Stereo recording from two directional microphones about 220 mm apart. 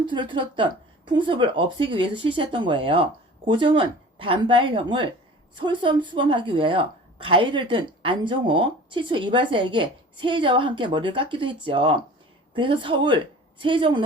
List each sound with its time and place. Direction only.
0.0 s a woman's voice: 20° right (ahead or behind)